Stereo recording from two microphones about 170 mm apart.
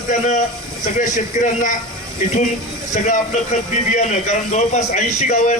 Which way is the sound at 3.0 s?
45° left (ahead or behind).